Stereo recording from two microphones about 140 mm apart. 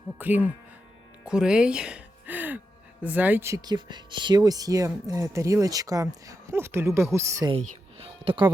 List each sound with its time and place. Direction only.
0.2 s speech: 10° right (ahead or behind)
1.2 s music: 5° right (ahead or behind)
3.0 s speech: 10° right (ahead or behind)
8.0 s speech: 40° right (ahead or behind)